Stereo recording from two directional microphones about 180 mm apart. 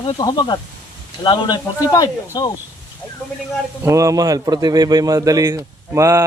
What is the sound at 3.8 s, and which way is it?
A man's voice, 20° right (ahead or behind).